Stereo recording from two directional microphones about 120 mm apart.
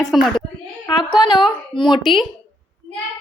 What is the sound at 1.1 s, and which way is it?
Speech, 40° left (ahead or behind).